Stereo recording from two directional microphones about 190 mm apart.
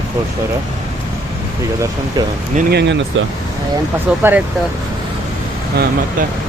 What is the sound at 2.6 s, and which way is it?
Speech, 55° right (ahead or behind).